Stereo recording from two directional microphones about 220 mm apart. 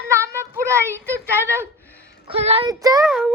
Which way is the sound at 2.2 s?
25° right (ahead or behind).